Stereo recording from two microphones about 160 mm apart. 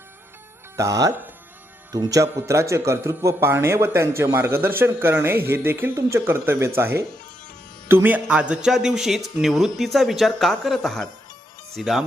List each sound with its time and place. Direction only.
0.8 s speech: 20° right (ahead or behind); by 12.0 s centre (ahead or behind)